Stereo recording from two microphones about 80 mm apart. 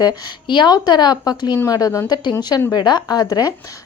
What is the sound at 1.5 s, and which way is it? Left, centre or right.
Speech, left.